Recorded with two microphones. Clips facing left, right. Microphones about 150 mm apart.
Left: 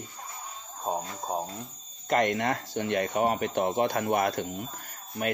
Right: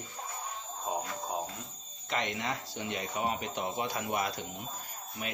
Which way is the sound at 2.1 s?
50° left (ahead or behind).